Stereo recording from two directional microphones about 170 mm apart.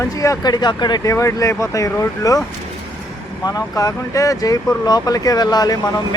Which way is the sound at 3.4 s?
20° left (ahead or behind).